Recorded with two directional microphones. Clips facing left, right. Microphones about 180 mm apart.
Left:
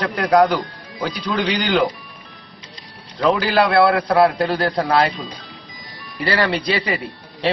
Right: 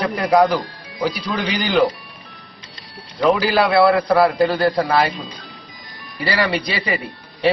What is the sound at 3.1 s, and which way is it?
A man's voice, 5° right (ahead or behind).